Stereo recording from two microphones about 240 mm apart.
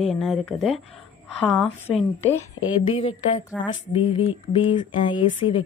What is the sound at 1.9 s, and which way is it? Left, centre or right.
Speech, centre.